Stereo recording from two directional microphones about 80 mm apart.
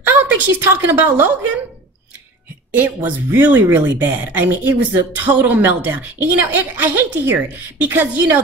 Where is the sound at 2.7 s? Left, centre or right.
Right.